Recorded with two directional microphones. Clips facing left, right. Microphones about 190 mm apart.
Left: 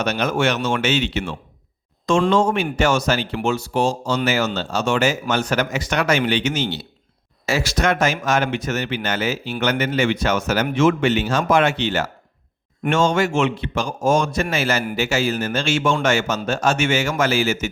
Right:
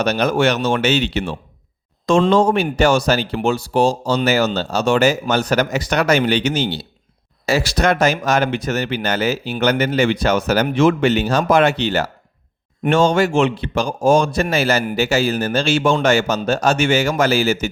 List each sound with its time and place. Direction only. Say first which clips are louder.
0.0 s speech: right 4 dB; 35° right (ahead or behind)